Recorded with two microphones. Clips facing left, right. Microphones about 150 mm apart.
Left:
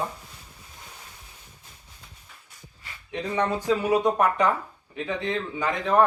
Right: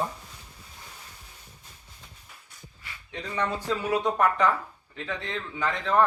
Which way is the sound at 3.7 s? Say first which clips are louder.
Left 5 dB; 15° left (ahead or behind).